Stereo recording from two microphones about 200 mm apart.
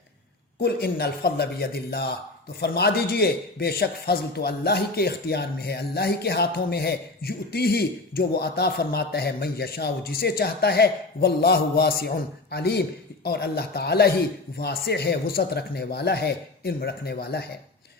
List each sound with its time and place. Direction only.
0.6 s a man's voice: 50° left (ahead or behind)